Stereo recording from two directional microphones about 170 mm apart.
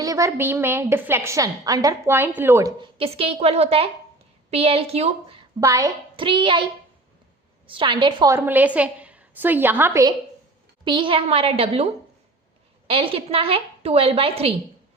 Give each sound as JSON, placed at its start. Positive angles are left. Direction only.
{"t": 0.0, "sound": "a woman's voice", "side_deg": -20}
{"t": 2.8, "sound": "a woman's voice", "side_deg": -35}
{"t": 5.5, "sound": "a woman's voice", "side_deg": -20}
{"t": 7.7, "sound": "a woman's voice", "side_deg": -30}
{"t": 8.4, "sound": "a woman's voice", "side_deg": -10}
{"t": 10.8, "sound": "a woman's voice", "side_deg": -30}
{"t": 12.9, "sound": "a woman's voice", "side_deg": -30}